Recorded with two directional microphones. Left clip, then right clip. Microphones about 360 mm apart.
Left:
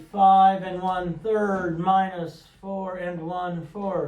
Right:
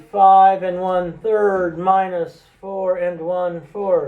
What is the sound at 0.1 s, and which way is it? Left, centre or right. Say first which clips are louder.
Mantra: right 6 dB; centre.